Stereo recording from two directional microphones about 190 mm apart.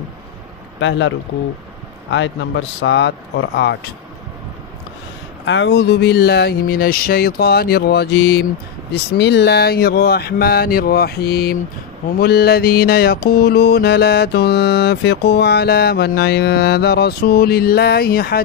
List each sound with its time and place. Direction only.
0.7 s speech: 75° left (ahead or behind)
5.4 s music: 70° left (ahead or behind); by 18.4 s 55° left (ahead or behind)